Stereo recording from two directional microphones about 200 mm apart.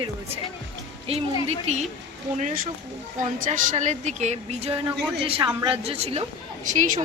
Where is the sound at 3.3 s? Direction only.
40° right (ahead or behind).